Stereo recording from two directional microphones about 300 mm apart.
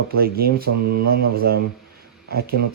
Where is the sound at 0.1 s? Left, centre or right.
Right.